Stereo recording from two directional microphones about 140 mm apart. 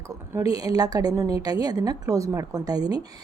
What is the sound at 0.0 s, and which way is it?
A woman's voice, 25° right (ahead or behind).